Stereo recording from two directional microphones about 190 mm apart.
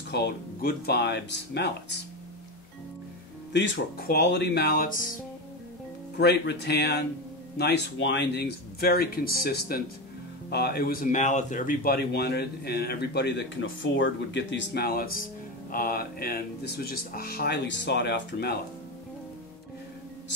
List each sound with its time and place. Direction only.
0.1 s a man's voice: 60° left (ahead or behind)
3.5 s a man's voice: 70° left (ahead or behind); by 5.1 s 45° left (ahead or behind)
6.1 s a man's voice: 60° left (ahead or behind)